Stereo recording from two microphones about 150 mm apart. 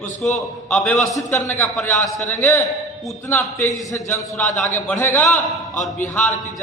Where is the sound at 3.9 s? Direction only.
15° left (ahead or behind).